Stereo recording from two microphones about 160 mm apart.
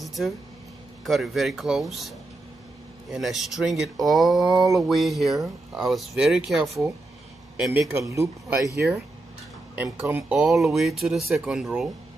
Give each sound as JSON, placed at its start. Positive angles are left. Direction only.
{"t": 0.0, "sound": "a sound", "side_deg": 0}
{"t": 1.0, "sound": "speech", "side_deg": 0}
{"t": 7.6, "sound": "speech", "side_deg": -15}
{"t": 9.8, "sound": "speech", "side_deg": -15}
{"t": 10.3, "sound": "speech", "side_deg": -5}